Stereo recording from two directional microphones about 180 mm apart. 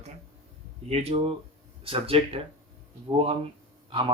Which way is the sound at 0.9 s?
35° right (ahead or behind).